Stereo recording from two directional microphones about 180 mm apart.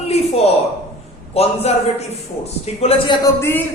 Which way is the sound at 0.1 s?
35° left (ahead or behind).